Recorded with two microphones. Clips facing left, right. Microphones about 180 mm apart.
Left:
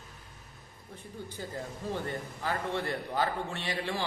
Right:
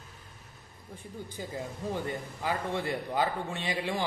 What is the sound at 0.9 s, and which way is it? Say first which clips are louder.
A man's voice: right 1 dB; 15° right (ahead or behind).